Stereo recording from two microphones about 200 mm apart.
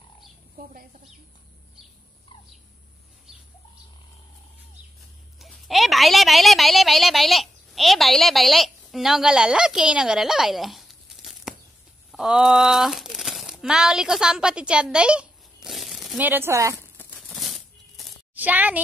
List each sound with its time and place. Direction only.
0.6 s speech: 45° right (ahead or behind)
5.4 s a woman's voice: centre (ahead or behind)
16.7 s a sound: 10° left (ahead or behind); by 18.8 s 10° right (ahead or behind)